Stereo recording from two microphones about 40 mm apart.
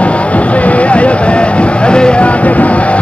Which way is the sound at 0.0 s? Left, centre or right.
Left.